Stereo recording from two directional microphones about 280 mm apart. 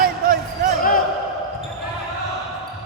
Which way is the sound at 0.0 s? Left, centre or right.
Right.